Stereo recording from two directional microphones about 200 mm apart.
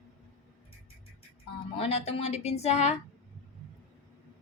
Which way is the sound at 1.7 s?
30° left (ahead or behind).